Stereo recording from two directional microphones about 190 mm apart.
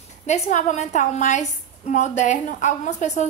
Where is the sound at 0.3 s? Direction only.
40° left (ahead or behind).